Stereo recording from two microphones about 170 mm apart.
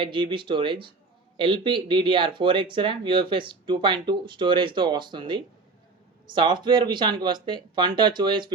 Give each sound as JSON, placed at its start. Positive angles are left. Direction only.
{"t": 0.0, "sound": "speech", "side_deg": -30}